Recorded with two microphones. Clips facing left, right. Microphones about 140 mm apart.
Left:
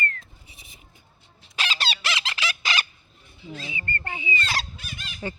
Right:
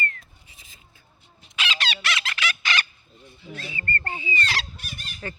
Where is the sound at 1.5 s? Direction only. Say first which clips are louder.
Even; 35° left (ahead or behind).